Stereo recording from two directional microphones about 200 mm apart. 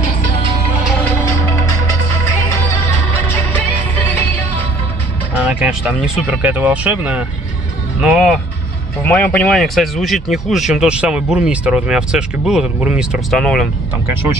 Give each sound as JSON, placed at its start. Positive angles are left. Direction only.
{"t": 5.4, "sound": "speech", "side_deg": -5}